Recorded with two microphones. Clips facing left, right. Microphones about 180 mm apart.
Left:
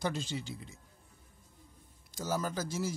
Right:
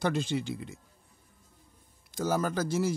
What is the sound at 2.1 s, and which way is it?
Speech, 60° right (ahead or behind).